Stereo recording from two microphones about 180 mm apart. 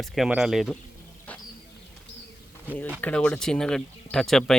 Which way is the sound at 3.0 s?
5° left (ahead or behind).